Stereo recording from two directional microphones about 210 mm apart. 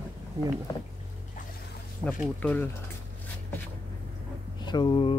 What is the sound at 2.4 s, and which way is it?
Speech, 10° left (ahead or behind).